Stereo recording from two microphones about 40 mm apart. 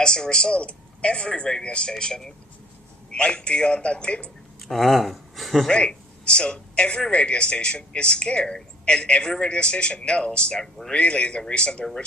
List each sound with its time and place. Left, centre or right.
0.0 s speech: centre
3.1 s speech: left
4.7 s speech: centre
5.7 s a man's voice: left
10.6 s speech: centre
10.9 s speech: left